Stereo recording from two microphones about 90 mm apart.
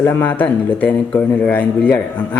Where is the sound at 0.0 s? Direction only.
20° left (ahead or behind).